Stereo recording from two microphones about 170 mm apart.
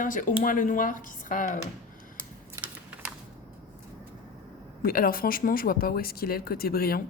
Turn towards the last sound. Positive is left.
turn(degrees=60)  # may be behind; listen again after turning